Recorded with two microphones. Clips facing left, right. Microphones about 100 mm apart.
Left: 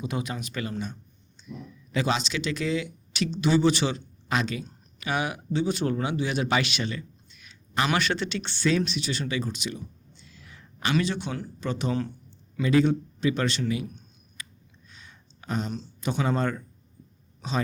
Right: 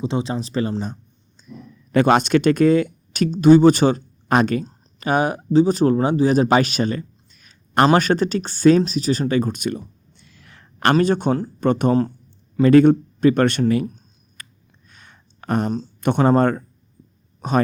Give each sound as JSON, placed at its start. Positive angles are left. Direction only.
{"t": 0.0, "sound": "speech", "side_deg": -30}
{"t": 1.5, "sound": "speech", "side_deg": -55}
{"t": 10.9, "sound": "speech", "side_deg": -50}
{"t": 13.8, "sound": "a sound", "side_deg": -40}
{"t": 14.8, "sound": "a sound", "side_deg": -55}
{"t": 15.7, "sound": "speech", "side_deg": -45}